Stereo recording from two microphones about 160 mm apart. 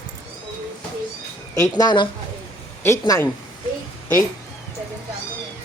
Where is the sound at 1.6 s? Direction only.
25° left (ahead or behind).